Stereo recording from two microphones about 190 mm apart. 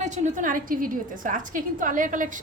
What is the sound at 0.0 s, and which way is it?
A woman's voice, 40° right (ahead or behind).